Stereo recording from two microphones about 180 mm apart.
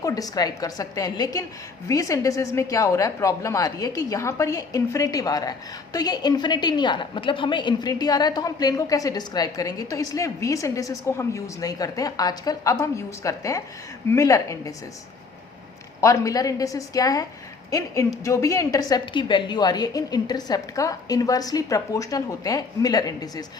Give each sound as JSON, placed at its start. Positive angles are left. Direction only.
{"t": 0.0, "sound": "a woman's voice", "side_deg": 20}
{"t": 16.0, "sound": "a woman's voice", "side_deg": 15}